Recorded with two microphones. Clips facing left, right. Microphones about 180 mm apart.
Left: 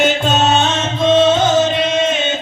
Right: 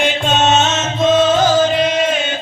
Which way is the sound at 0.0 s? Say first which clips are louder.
Left 1 dB; 40° left (ahead or behind).